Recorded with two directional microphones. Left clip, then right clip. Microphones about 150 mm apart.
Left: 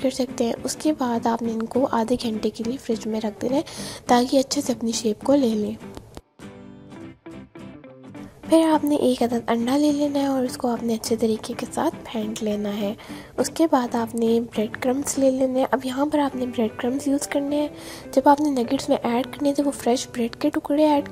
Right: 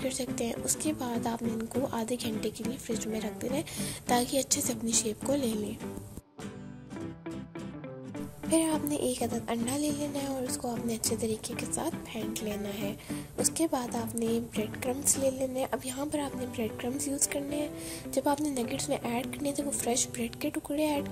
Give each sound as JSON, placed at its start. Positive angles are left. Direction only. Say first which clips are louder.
{"t": 0.0, "sound": "a woman's voice", "louder": "left 10 dB", "side_deg": 35}
{"t": 8.5, "sound": "a woman's voice", "louder": "left 11 dB", "side_deg": 40}